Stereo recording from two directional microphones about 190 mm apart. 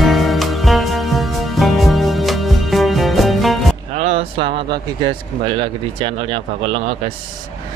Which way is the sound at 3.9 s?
35° right (ahead or behind).